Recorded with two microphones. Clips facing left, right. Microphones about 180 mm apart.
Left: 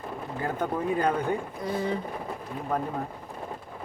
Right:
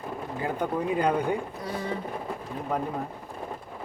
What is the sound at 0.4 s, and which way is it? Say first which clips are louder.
Speech: even; 15° right (ahead or behind).